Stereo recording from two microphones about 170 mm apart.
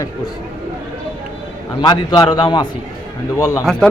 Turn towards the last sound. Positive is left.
turn(degrees=20)  # may be behind; listen again after turning